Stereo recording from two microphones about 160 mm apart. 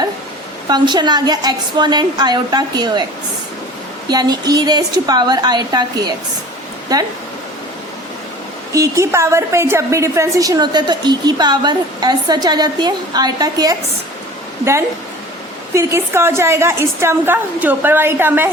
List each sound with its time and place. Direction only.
0.7 s a woman's voice: 25° right (ahead or behind)
4.1 s a woman's voice: 25° right (ahead or behind)
8.7 s a woman's voice: 20° right (ahead or behind)